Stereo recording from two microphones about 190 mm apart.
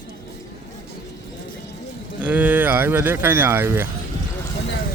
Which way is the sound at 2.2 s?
10° right (ahead or behind).